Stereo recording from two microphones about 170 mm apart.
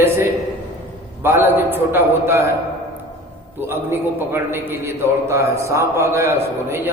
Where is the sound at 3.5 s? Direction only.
15° right (ahead or behind).